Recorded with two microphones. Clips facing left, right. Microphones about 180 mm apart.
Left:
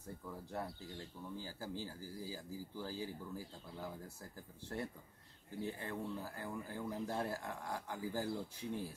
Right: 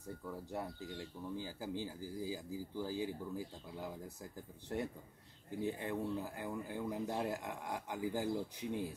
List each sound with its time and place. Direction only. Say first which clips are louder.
0.2 s speech: right 1 dB; 10° right (ahead or behind)